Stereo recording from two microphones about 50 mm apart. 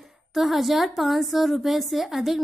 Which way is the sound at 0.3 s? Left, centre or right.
Centre.